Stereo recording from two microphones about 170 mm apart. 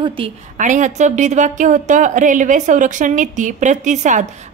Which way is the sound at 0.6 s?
45° right (ahead or behind).